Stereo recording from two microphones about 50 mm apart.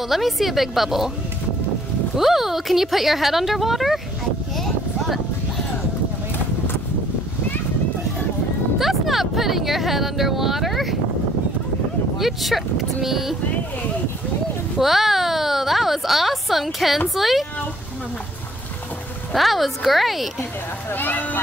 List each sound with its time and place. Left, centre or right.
0.0 s speech: centre
2.1 s speech: centre
4.6 s a sound: centre
8.7 s speech: centre
12.2 s speech: centre
14.8 s speech: centre
19.3 s speech: centre
20.9 s speech: left